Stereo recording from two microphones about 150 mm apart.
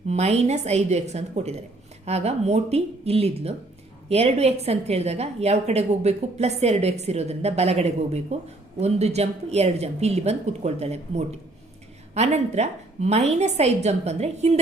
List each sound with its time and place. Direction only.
0.1 s a woman's voice: 50° right (ahead or behind)